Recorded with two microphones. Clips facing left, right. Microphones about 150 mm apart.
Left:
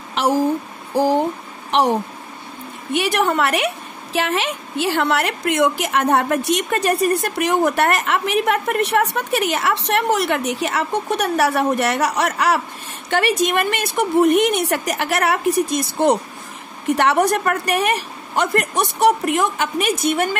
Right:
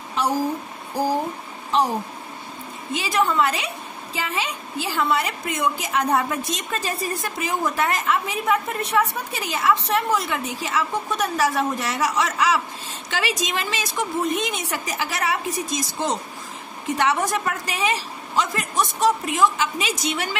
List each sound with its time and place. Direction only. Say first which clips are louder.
0.1 s a sound: left 4 dB; 90° left
0.9 s speech: left 6 dB; 90° left
2.9 s a woman's voice: left 4 dB; 70° left (ahead or behind); by 20.3 s 50° left (ahead or behind)